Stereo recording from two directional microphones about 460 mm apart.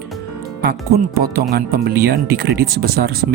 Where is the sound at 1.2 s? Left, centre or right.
Centre.